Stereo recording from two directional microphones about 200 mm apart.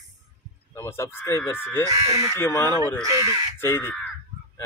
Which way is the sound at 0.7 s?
15° left (ahead or behind).